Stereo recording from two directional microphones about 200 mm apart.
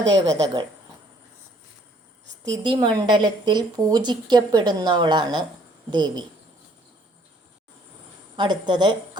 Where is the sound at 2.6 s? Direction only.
20° right (ahead or behind).